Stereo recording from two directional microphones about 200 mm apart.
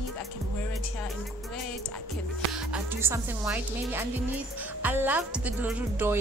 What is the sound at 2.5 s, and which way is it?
Speech, 10° right (ahead or behind).